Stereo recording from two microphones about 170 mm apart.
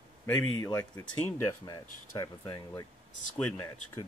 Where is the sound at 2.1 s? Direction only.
20° left (ahead or behind).